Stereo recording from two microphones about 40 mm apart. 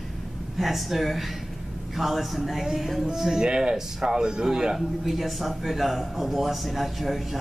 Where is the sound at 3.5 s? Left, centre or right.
Right.